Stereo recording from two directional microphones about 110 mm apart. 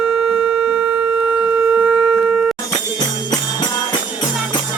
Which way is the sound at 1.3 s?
10° right (ahead or behind).